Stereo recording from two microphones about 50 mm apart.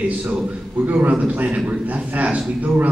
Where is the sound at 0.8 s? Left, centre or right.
Right.